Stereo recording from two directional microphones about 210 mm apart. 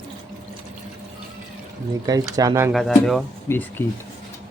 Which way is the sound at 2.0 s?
15° right (ahead or behind).